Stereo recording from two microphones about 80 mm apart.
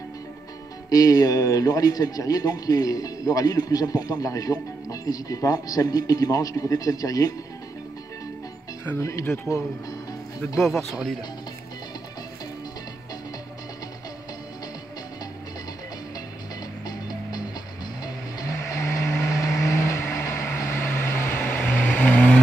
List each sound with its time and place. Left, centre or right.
0.8 s a man's voice: left
8.9 s speech: left
9.2 s speech: left
10.6 s speech: centre
16.8 s music: left
18.6 s vehicle: left; by 22.4 s centre